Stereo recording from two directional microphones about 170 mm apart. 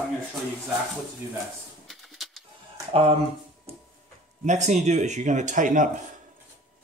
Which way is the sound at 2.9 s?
35° right (ahead or behind).